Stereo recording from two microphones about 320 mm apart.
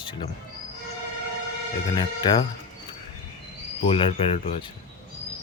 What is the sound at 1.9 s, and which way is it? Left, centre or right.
Speech, centre.